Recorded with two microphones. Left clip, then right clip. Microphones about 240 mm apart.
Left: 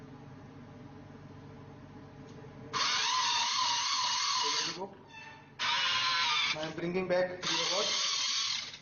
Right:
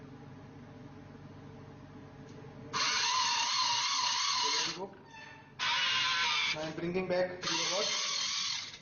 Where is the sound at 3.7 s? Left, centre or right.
Centre.